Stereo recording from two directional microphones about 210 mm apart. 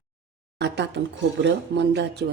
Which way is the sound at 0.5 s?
55° right (ahead or behind).